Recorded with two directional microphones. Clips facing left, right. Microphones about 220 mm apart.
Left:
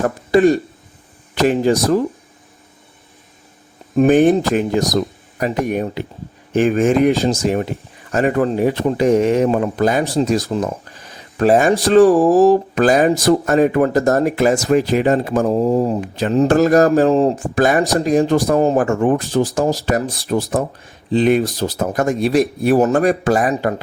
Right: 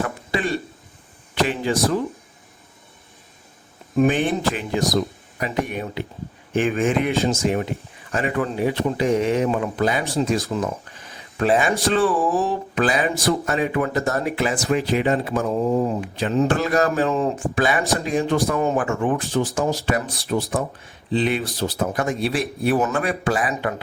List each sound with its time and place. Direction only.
0.0 s speech: 45° left (ahead or behind)
3.9 s speech: 45° left (ahead or behind)